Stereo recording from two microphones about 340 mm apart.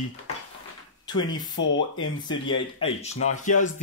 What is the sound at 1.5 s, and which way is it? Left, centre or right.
Speech, left.